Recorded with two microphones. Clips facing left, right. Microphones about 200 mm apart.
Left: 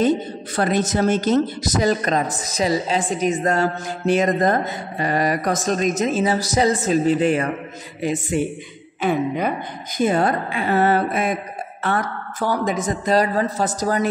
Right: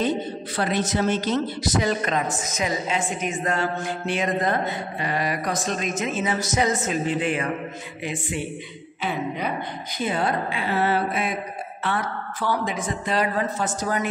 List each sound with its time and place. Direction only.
0.6 s speech: 45° left (ahead or behind)